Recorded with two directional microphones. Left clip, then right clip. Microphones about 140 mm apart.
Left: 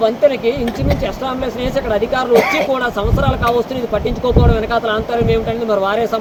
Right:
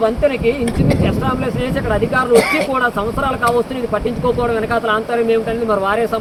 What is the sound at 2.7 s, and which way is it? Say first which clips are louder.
Speech: even; 10° left (ahead or behind).